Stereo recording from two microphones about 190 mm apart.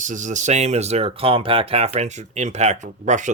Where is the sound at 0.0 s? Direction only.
40° right (ahead or behind).